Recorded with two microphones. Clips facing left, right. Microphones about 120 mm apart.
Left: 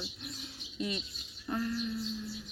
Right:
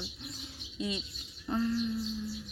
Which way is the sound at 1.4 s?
20° right (ahead or behind).